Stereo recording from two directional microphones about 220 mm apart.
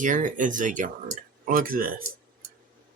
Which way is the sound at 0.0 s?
35° right (ahead or behind).